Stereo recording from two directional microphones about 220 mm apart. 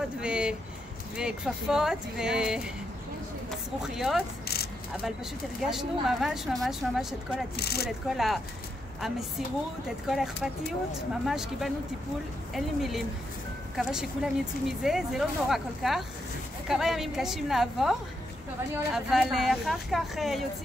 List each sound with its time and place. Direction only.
0.2 s speech: 5° right (ahead or behind)
3.8 s speech: centre (ahead or behind)
5.6 s speech: centre (ahead or behind)
7.5 s speech: 45° left (ahead or behind)
8.1 s speech: centre (ahead or behind)
9.8 s speech: centre (ahead or behind)
18.9 s speech: centre (ahead or behind)